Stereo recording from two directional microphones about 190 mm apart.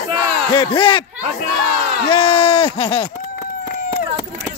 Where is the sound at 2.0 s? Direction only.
30° left (ahead or behind).